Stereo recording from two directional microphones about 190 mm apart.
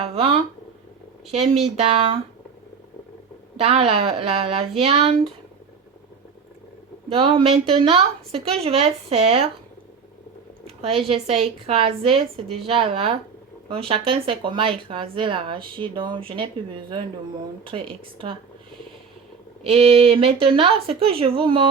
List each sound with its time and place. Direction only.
0.0 s a sound: 30° right (ahead or behind)
1.3 s a woman's voice: 30° right (ahead or behind)
3.6 s a woman's voice: 30° right (ahead or behind)
7.1 s a woman's voice: 25° right (ahead or behind)
10.8 s a woman's voice: 30° right (ahead or behind)
17.6 s speech: 25° right (ahead or behind)
19.7 s speech: 30° right (ahead or behind)